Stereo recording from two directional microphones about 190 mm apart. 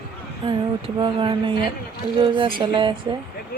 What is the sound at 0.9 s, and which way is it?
Speech, 25° right (ahead or behind).